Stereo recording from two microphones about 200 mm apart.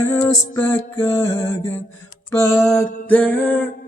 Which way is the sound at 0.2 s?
10° left (ahead or behind).